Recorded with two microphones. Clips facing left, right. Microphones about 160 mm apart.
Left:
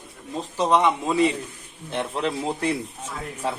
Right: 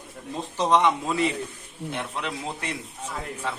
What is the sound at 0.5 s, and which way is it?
Speech, 10° left (ahead or behind).